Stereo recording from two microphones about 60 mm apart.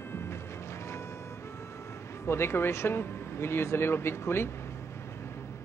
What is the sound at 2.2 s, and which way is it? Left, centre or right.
Speech, left.